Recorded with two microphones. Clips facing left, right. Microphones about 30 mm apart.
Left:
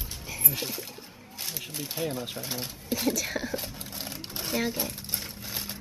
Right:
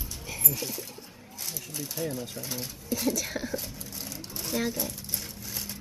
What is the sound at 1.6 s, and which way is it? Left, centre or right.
Speech, left.